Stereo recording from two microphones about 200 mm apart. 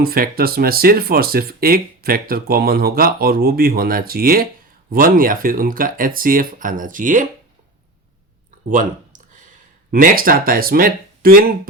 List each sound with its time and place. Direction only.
0.0 s speech: 50° right (ahead or behind)
8.7 s speech: 40° right (ahead or behind)